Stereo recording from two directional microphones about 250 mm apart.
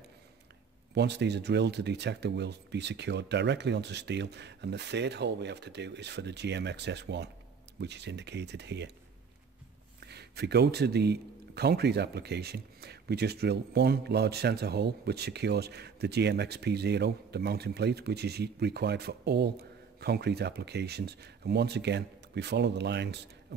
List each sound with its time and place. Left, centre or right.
0.9 s speech: right
10.0 s a man's voice: right